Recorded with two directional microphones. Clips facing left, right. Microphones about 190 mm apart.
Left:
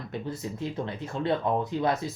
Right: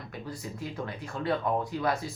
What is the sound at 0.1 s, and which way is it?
Speech, 25° left (ahead or behind).